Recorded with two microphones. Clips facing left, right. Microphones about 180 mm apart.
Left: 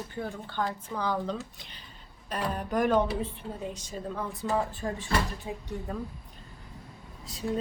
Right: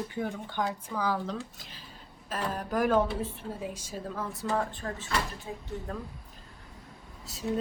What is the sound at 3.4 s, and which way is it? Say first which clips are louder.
Speech: even; 5° right (ahead or behind).